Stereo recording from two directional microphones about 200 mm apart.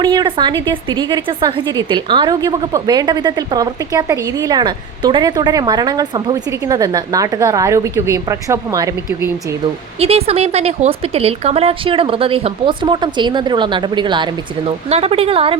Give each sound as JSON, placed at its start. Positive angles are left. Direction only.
{"t": 0.0, "sound": "a woman's voice", "side_deg": -20}
{"t": 10.0, "sound": "a woman's voice", "side_deg": -30}